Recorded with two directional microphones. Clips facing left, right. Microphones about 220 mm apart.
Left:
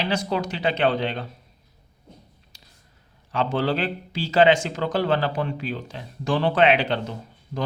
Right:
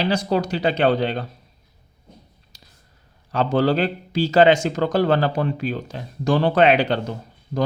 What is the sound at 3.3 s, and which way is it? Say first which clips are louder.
A man's voice: right 5 dB; 40° right (ahead or behind).